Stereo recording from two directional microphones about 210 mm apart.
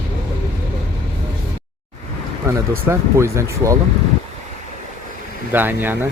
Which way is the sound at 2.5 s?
15° right (ahead or behind).